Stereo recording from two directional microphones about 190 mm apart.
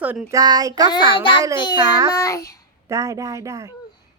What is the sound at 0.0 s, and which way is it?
Speech, 10° right (ahead or behind).